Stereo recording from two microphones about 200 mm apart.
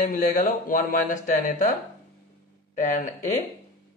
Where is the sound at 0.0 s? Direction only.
40° left (ahead or behind).